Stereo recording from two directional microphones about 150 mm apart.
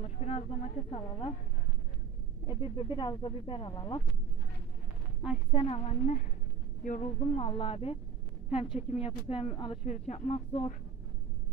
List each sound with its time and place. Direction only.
0.0 s speech: 45° left (ahead or behind)
2.4 s speech: 35° left (ahead or behind)
5.5 s speech: 45° left (ahead or behind)
6.8 s speech: 60° left (ahead or behind)
7.2 s speech: 40° left (ahead or behind)